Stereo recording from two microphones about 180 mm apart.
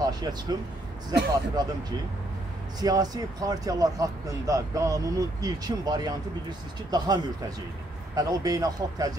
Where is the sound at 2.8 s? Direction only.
20° right (ahead or behind).